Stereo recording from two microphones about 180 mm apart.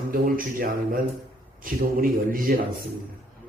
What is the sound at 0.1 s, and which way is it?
A man's voice, 50° right (ahead or behind).